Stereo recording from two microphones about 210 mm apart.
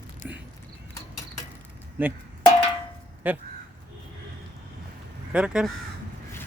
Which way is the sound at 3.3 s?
10° right (ahead or behind).